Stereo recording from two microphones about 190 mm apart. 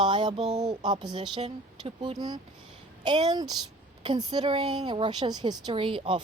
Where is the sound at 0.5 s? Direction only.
20° right (ahead or behind).